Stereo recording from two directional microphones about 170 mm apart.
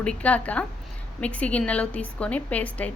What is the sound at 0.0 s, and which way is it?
A woman's voice, 5° left (ahead or behind).